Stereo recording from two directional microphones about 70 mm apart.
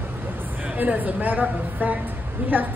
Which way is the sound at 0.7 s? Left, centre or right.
Right.